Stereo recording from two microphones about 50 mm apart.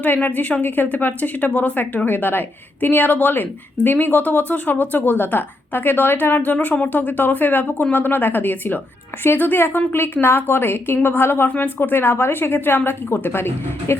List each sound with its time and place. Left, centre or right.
0.0 s a woman's voice: left